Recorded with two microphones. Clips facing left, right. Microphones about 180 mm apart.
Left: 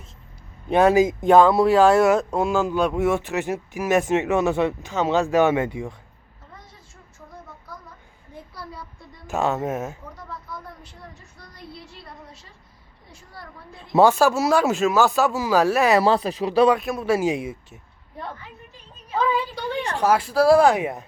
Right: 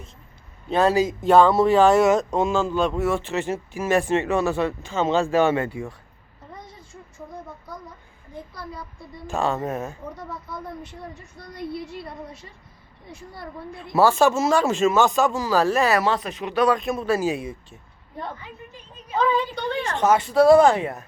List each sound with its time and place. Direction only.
0.7 s speech: 15° left (ahead or behind)
9.3 s speech: 10° left (ahead or behind)
10.2 s speech: 20° right (ahead or behind)
13.9 s speech: 15° left (ahead or behind)
14.2 s speech: 5° left (ahead or behind)
16.0 s speech: 30° left (ahead or behind)
16.8 s speech: 5° left (ahead or behind)
19.1 s speech: 5° left (ahead or behind)